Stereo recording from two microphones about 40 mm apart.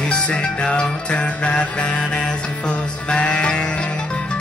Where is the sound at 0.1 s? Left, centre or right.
Left.